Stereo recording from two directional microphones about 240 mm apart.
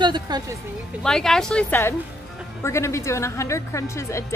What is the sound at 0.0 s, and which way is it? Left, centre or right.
Speech, centre.